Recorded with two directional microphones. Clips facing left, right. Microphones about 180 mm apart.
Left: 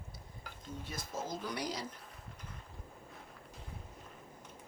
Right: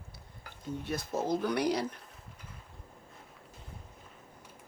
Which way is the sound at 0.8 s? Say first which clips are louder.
Right 9 dB; 65° right (ahead or behind).